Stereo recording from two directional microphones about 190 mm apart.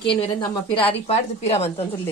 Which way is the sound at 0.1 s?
30° left (ahead or behind).